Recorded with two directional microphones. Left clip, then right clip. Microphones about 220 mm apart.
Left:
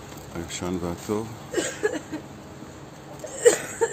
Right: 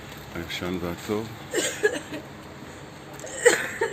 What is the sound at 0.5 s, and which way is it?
Speech, 10° left (ahead or behind).